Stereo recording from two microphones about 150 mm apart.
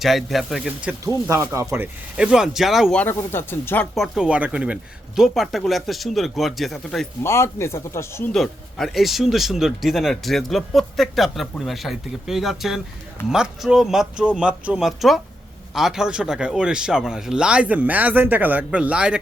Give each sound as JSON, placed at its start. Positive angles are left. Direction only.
{"t": 0.0, "sound": "speech", "side_deg": 0}
{"t": 0.9, "sound": "speech", "side_deg": -20}
{"t": 3.0, "sound": "speech", "side_deg": 15}
{"t": 3.9, "sound": "speech", "side_deg": 0}
{"t": 7.2, "sound": "speech", "side_deg": 20}
{"t": 8.3, "sound": "speech", "side_deg": 0}